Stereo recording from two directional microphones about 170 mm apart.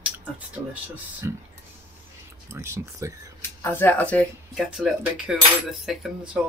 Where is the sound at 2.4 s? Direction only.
15° right (ahead or behind).